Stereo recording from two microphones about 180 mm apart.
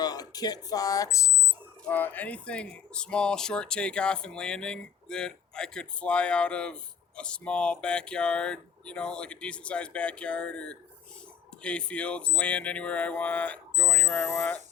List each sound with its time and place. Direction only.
0.0 s speech: 20° left (ahead or behind)